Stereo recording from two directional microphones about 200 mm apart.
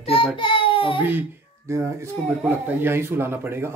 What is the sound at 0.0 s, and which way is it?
Baby cry, 30° left (ahead or behind).